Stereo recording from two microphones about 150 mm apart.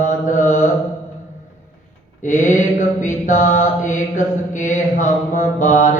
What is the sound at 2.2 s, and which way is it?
Mantra, 55° left (ahead or behind).